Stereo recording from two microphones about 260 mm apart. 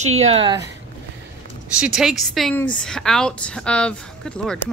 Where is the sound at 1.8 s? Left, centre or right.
Centre.